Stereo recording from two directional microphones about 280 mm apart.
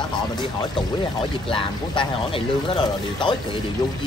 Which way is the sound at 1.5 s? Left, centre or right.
Centre.